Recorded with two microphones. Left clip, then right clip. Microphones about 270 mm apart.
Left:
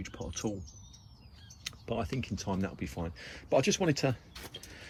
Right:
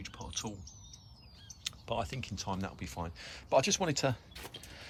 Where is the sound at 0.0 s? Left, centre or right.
Centre.